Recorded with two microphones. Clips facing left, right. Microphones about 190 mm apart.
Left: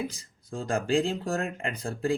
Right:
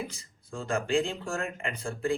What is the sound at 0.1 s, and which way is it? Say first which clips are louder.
Speech: left 3 dB; 35° left (ahead or behind).